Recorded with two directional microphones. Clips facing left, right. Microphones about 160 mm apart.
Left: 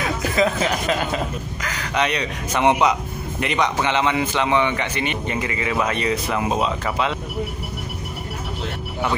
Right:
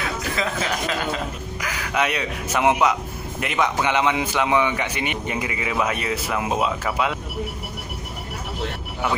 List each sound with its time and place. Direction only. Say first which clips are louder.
0.4 s speech: left 8 dB; 20° left (ahead or behind)
1.6 s speech: left 1 dB; 10° right (ahead or behind)